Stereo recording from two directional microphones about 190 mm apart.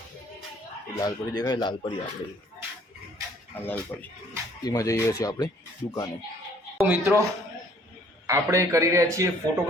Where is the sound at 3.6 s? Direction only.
10° left (ahead or behind).